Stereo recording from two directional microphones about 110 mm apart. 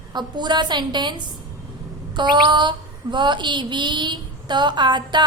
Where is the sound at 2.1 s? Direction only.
45° right (ahead or behind).